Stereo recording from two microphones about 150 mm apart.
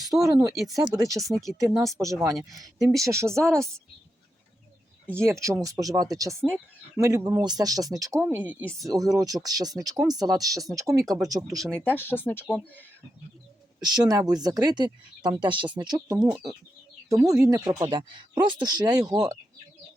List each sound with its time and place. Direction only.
0.1 s speech: 10° right (ahead or behind)
0.4 s speech: 25° right (ahead or behind)
5.1 s speech: 20° right (ahead or behind)
11.5 s speech: centre (ahead or behind)
11.8 s speech: 15° left (ahead or behind)
13.8 s speech: 25° right (ahead or behind)
17.7 s speech: 35° right (ahead or behind)